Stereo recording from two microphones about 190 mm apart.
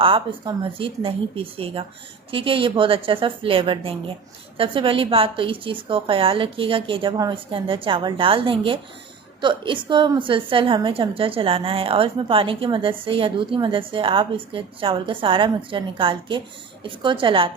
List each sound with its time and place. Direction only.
0.0 s a woman's voice: 25° right (ahead or behind)